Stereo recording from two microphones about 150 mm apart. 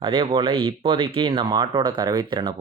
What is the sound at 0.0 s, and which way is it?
Speech, 35° right (ahead or behind).